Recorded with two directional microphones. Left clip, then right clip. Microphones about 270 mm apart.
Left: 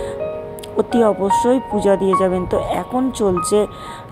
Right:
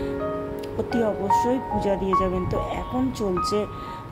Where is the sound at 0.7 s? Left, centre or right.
Left.